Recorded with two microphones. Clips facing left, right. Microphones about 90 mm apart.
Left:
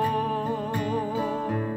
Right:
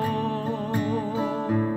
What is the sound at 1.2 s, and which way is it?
Music, 15° right (ahead or behind).